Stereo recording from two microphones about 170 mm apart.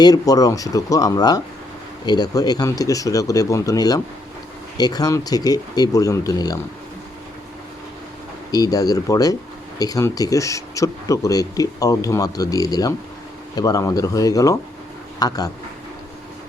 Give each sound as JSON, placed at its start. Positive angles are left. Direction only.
{"t": 0.0, "sound": "speech", "side_deg": 20}
{"t": 8.5, "sound": "speech", "side_deg": 20}